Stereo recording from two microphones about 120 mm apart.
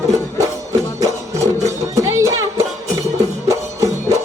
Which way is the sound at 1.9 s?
25° right (ahead or behind).